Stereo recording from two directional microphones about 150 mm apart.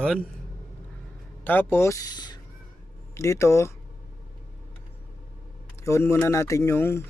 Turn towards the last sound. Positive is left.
turn(degrees=15)  # may be behind; listen again after turning